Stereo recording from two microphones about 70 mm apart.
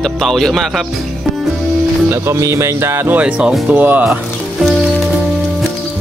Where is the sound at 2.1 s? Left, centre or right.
Right.